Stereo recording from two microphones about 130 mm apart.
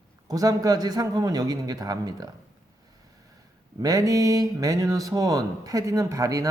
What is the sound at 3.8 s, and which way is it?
Speech, 25° right (ahead or behind).